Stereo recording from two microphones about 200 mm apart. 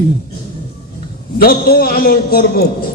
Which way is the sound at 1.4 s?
50° left (ahead or behind).